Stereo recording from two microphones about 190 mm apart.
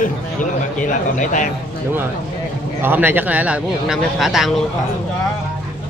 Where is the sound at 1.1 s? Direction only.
40° left (ahead or behind).